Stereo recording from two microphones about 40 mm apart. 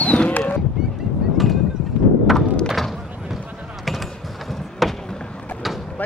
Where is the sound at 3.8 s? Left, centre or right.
Centre.